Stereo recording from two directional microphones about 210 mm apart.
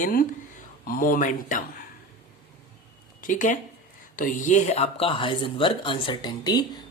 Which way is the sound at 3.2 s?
35° left (ahead or behind).